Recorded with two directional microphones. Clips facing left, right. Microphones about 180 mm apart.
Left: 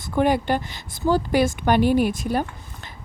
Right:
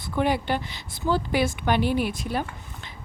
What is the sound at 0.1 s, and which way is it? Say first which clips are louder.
A woman's voice: left 4 dB; 45° left (ahead or behind).